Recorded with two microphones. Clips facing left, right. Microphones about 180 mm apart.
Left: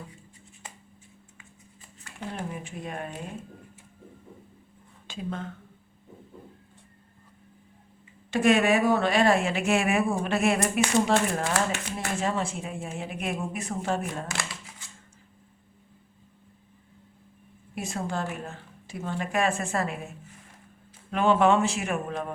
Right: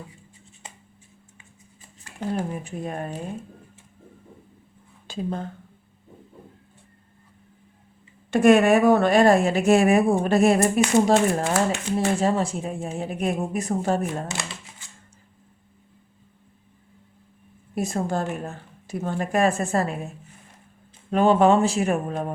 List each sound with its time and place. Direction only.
2.2 s a woman's voice: 40° right (ahead or behind)
5.0 s speech: 35° right (ahead or behind)
8.3 s a woman's voice: 50° right (ahead or behind)
17.7 s a woman's voice: 40° right (ahead or behind)
21.1 s a woman's voice: 35° right (ahead or behind)